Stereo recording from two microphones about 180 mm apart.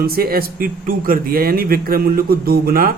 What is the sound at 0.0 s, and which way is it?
Speech, 55° right (ahead or behind).